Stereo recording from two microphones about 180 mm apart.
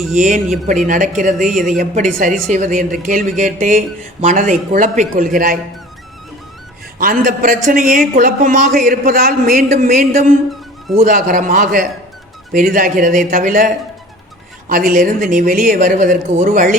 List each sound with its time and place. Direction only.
0.2 s a man's voice: 45° right (ahead or behind)
1.5 s speech: centre (ahead or behind)
1.7 s a man's voice: 45° right (ahead or behind)
7.0 s a man's voice: 50° right (ahead or behind)